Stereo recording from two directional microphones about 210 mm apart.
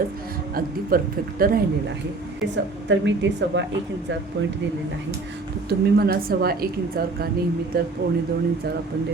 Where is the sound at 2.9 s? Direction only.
60° right (ahead or behind).